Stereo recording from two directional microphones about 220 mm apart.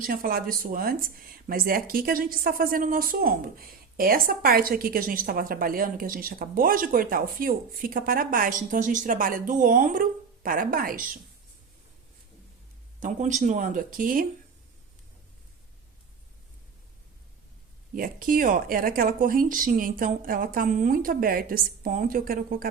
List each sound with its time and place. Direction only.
0.0 s speech: 40° right (ahead or behind)
13.0 s speech: 35° right (ahead or behind)
17.9 s speech: 40° right (ahead or behind)